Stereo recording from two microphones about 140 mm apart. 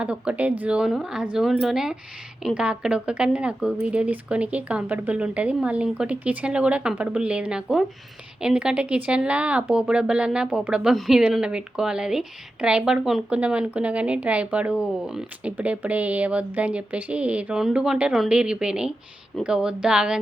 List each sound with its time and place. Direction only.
0.0 s speech: 10° right (ahead or behind)